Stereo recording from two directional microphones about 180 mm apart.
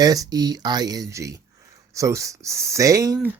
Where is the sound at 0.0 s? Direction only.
20° right (ahead or behind).